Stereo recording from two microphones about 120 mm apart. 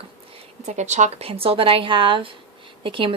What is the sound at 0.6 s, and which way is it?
Speech, 75° right (ahead or behind).